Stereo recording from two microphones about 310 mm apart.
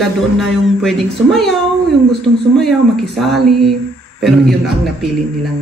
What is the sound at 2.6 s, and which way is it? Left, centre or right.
Speech, centre.